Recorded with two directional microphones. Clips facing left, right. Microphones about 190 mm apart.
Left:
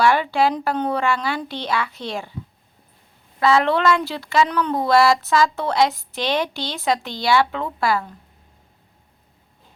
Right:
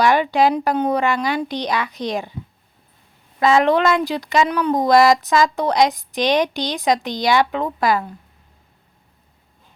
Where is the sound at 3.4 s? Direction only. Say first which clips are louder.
Right 2 dB; 15° right (ahead or behind).